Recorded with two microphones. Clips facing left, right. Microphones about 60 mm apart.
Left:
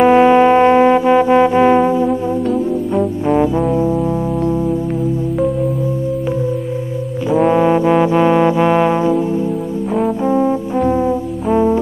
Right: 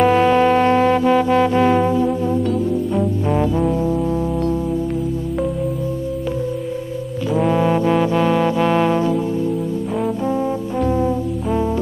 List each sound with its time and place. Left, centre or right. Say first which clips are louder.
0.0 s music: left 5 dB; centre
7.4 s trombone: left 4 dB; centre
10.2 s brass instrument: left 5 dB; left